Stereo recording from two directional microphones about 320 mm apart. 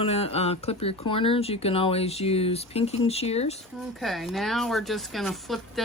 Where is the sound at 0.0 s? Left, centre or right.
Centre.